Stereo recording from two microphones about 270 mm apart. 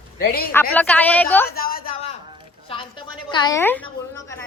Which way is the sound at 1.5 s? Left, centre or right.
Left.